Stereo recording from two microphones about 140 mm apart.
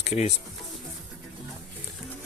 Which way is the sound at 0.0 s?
50° left (ahead or behind).